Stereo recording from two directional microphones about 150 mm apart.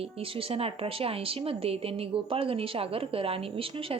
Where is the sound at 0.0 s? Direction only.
40° right (ahead or behind).